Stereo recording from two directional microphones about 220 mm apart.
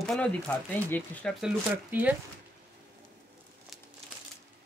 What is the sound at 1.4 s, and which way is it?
Speech, 5° right (ahead or behind).